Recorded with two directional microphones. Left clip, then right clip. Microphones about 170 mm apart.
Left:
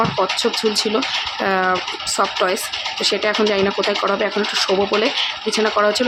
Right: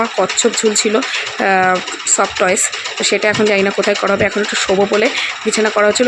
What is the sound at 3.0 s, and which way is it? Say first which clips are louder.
Speech: right 4 dB; 15° right (ahead or behind).